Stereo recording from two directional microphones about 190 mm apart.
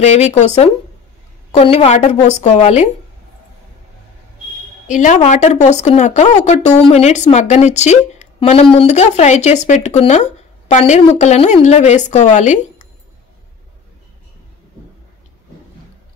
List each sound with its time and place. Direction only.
0.0 s speech: 35° left (ahead or behind)
4.8 s speech: 40° left (ahead or behind)